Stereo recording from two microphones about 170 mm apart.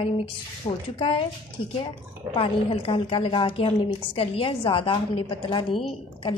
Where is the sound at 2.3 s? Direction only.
30° left (ahead or behind).